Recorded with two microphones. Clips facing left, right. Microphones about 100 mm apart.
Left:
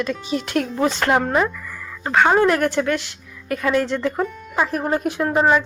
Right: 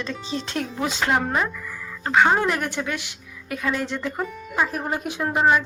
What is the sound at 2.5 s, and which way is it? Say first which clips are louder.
Speech: left 7 dB; 15° right (ahead or behind).